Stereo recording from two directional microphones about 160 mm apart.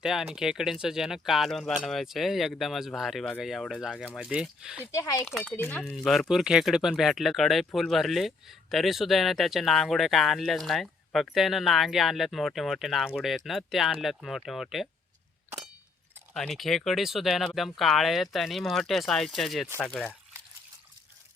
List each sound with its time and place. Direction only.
0.0 s speech: centre (ahead or behind)
4.9 s speech: 20° left (ahead or behind)
5.2 s speech: 5° left (ahead or behind)
16.3 s speech: centre (ahead or behind)